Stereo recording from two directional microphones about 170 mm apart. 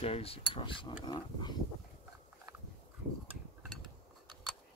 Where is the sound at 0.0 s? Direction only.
35° left (ahead or behind).